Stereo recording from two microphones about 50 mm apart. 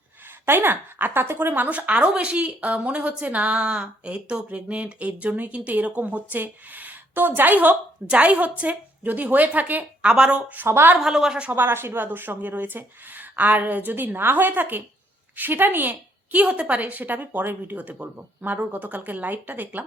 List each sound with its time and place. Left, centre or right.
0.4 s a woman's voice: right
1.7 s a woman's voice: right
10.1 s a woman's voice: right
11.0 s a woman's voice: centre
11.5 s speech: right
16.3 s speech: right
17.7 s speech: right